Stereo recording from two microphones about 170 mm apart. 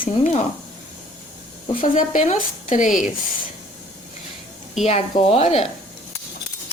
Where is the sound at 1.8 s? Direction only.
50° left (ahead or behind).